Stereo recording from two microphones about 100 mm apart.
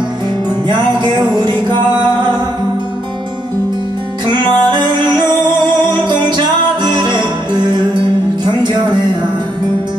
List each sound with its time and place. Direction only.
4.3 s music: 45° right (ahead or behind)